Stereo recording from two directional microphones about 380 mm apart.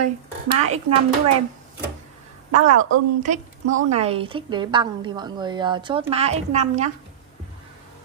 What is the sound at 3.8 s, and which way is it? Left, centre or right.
A woman's voice, centre.